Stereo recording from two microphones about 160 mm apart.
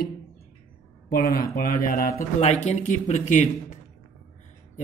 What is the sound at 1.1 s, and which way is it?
Speech, 65° left (ahead or behind).